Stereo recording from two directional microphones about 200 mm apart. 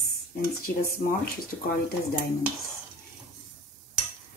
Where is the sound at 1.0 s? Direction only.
40° left (ahead or behind).